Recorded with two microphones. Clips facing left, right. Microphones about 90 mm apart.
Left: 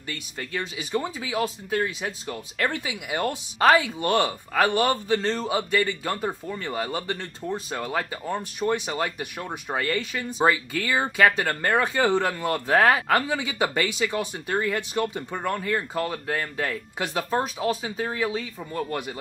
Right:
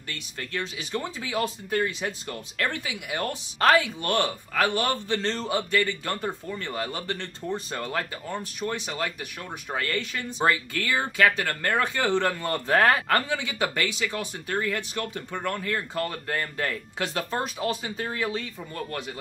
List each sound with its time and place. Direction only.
0.1 s speech: 10° left (ahead or behind)